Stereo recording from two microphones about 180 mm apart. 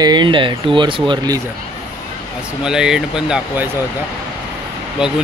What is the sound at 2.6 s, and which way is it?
Speech, 5° right (ahead or behind).